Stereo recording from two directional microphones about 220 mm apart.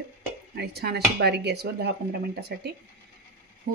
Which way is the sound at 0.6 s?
45° right (ahead or behind).